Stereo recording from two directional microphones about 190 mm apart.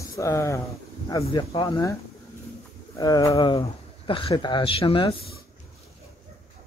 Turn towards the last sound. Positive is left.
turn(degrees=25)  # may be behind; listen again after turning